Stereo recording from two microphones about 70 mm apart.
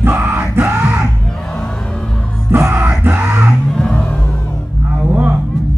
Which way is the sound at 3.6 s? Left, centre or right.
Centre.